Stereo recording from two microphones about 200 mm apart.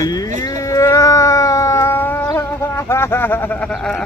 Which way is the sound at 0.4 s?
15° left (ahead or behind).